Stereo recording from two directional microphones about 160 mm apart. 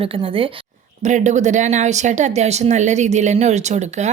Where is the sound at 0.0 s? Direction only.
35° right (ahead or behind).